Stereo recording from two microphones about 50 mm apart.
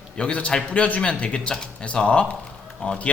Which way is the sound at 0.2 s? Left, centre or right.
Left.